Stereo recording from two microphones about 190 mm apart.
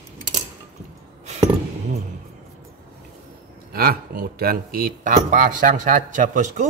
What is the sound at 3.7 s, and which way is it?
Speech, 50° right (ahead or behind).